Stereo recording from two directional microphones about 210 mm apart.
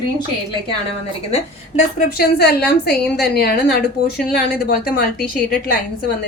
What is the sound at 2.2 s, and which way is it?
A woman's voice, 50° left (ahead or behind).